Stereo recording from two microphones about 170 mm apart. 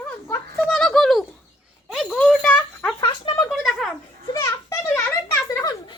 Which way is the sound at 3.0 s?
25° left (ahead or behind).